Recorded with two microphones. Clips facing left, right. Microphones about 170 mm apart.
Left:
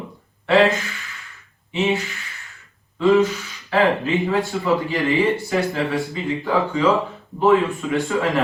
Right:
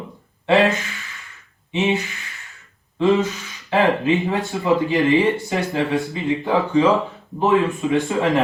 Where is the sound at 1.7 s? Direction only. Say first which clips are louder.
Right 1 dB; 20° right (ahead or behind).